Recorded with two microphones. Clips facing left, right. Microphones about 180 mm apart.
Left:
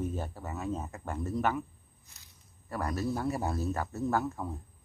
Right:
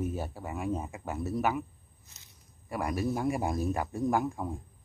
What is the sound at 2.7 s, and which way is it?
Speech, 10° right (ahead or behind).